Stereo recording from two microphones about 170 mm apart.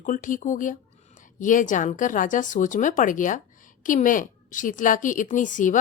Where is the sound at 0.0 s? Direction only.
50° left (ahead or behind).